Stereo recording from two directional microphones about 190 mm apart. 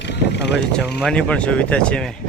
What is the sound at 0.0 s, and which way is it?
Vehicle, 65° left (ahead or behind).